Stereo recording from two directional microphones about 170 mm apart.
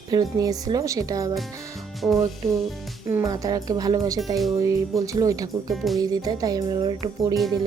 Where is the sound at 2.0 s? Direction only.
Centre (ahead or behind).